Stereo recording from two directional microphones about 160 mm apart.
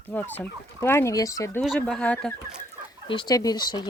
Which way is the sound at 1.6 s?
5° left (ahead or behind).